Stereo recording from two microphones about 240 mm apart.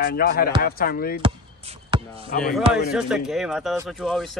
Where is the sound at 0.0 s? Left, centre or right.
Left.